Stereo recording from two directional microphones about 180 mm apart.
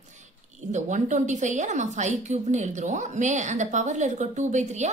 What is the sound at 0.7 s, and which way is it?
A woman's voice, 40° right (ahead or behind).